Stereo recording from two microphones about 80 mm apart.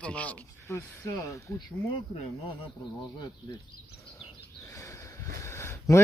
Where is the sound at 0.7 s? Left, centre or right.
Left.